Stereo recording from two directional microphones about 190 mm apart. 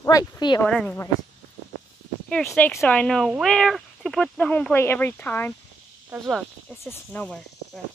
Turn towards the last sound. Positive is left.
turn(degrees=5)  # may be behind; listen again after turning